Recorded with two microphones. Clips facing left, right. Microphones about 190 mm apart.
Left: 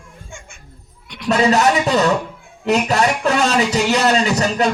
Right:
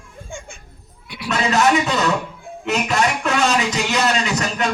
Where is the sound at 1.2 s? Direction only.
35° left (ahead or behind).